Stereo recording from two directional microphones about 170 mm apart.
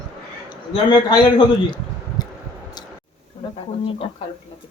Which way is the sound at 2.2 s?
25° left (ahead or behind).